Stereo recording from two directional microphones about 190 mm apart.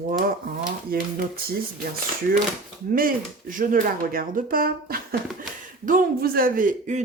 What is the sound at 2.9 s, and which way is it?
A man's voice, 45° right (ahead or behind).